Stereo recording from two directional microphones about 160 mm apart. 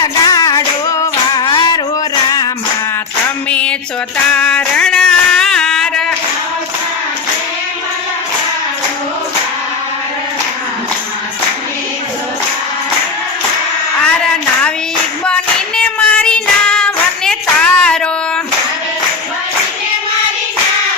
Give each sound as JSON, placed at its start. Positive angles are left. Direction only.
{"t": 0.0, "sound": "music", "side_deg": 25}
{"t": 3.5, "sound": "a sound", "side_deg": 5}
{"t": 15.2, "sound": "child singing", "side_deg": 5}